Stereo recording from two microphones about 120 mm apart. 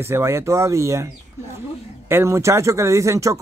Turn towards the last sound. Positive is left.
turn(degrees=-25)  # may be behind; listen again after turning